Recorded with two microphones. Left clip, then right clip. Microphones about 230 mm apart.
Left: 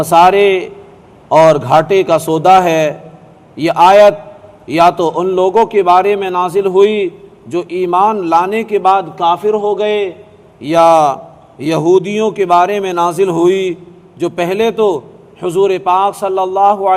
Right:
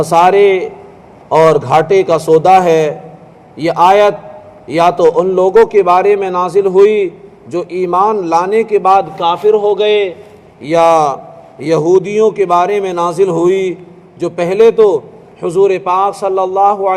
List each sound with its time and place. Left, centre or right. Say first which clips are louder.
0.0 s a man's voice: even; left